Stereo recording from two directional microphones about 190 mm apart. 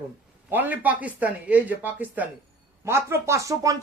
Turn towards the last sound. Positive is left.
turn(degrees=-15)  # may be behind; listen again after turning